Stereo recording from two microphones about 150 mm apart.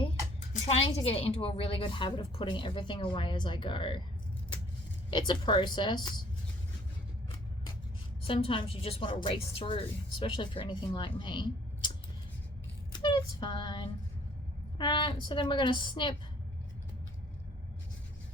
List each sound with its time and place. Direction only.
0.7 s a woman's voice: 40° left (ahead or behind)
5.1 s speech: 30° left (ahead or behind)
8.2 s a woman's voice: 40° left (ahead or behind)
12.9 s a woman's voice: 30° left (ahead or behind)